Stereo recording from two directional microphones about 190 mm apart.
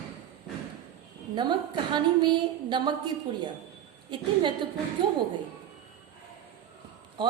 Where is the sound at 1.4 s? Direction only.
25° right (ahead or behind).